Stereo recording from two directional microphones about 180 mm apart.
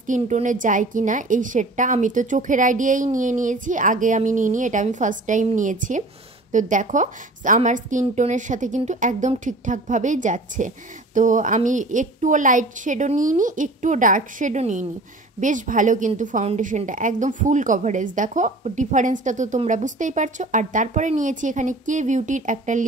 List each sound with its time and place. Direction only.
0.0 s speech: 45° right (ahead or behind)